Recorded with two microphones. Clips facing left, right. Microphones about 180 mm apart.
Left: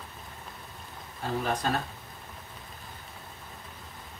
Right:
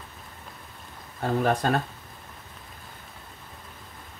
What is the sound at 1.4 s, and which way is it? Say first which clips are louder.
Speech: right 6 dB; 55° right (ahead or behind).